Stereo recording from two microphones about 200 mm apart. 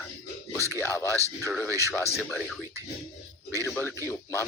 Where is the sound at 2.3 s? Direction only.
5° left (ahead or behind).